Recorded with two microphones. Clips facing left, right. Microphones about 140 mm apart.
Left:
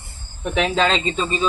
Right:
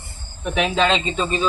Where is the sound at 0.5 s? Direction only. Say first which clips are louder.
Even; 5° right (ahead or behind).